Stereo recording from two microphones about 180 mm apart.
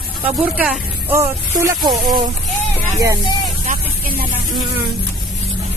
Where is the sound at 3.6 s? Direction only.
55° right (ahead or behind).